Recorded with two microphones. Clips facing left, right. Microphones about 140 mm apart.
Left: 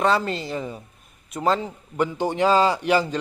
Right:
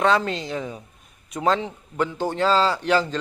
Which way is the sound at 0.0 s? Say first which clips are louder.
Right 1 dB; 5° left (ahead or behind).